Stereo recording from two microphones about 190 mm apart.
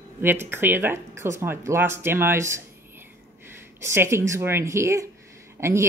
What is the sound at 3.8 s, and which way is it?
Speech, 15° right (ahead or behind).